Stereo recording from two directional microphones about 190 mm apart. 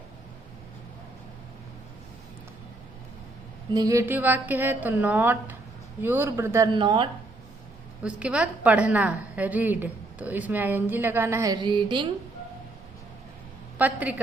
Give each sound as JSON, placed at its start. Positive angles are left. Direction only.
{"t": 3.7, "sound": "a woman's voice", "side_deg": -20}
{"t": 8.0, "sound": "a woman's voice", "side_deg": -5}
{"t": 13.7, "sound": "a woman's voice", "side_deg": -10}